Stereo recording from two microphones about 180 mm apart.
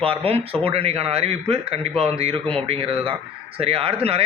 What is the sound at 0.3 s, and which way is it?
A man's voice, 35° right (ahead or behind).